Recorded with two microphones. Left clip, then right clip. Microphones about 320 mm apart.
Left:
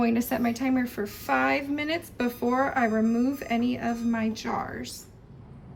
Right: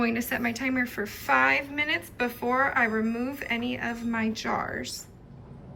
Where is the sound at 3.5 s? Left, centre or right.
Left.